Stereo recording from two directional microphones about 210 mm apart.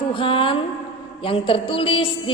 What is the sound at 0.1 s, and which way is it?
A woman's voice, 25° left (ahead or behind).